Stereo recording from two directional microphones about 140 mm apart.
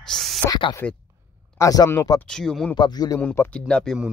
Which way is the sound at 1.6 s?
25° left (ahead or behind).